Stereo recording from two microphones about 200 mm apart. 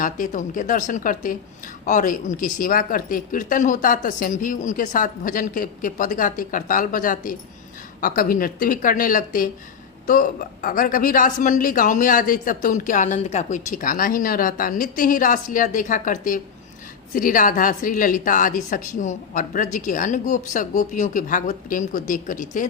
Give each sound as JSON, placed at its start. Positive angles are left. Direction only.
{"t": 0.0, "sound": "a woman's voice", "side_deg": 40}